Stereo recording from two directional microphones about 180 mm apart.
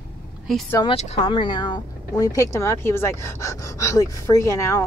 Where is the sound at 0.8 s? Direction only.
35° left (ahead or behind).